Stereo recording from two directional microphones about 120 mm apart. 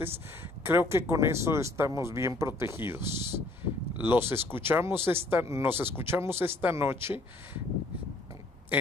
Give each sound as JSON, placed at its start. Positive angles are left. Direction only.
{"t": 0.7, "sound": "speech", "side_deg": -20}